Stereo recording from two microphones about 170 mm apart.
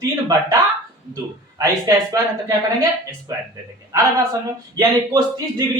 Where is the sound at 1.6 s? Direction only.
20° right (ahead or behind).